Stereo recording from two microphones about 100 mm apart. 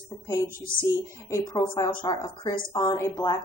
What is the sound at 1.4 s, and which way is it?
A woman's voice, 50° left (ahead or behind).